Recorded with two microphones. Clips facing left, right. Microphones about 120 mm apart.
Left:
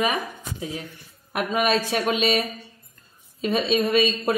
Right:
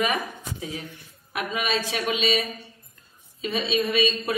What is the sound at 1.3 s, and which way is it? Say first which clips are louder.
A woman's voice: left 5 dB; 45° left (ahead or behind).